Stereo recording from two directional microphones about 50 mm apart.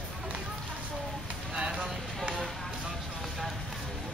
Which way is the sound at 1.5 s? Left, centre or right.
Centre.